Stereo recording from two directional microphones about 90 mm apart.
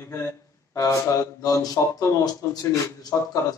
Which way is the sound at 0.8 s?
40° left (ahead or behind).